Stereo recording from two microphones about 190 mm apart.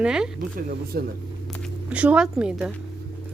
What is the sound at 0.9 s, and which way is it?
Speech, 55° right (ahead or behind).